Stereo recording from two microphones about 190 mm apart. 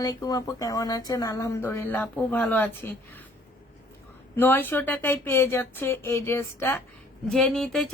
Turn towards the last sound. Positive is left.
turn(degrees=0)  # may be behind; listen again after turning